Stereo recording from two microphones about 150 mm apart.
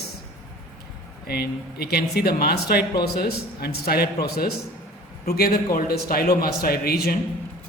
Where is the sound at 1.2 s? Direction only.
90° left.